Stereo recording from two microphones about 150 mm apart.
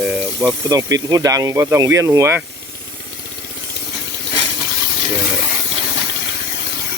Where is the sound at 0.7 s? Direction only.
25° right (ahead or behind).